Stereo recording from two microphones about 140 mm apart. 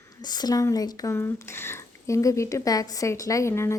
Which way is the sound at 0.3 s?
30° left (ahead or behind).